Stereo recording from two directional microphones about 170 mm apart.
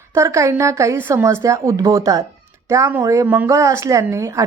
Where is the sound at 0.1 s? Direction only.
15° right (ahead or behind).